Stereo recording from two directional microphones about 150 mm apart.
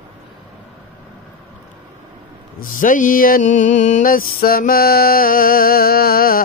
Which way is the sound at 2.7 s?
65° left (ahead or behind).